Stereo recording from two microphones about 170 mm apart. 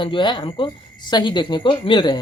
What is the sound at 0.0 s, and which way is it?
Speech, 30° left (ahead or behind).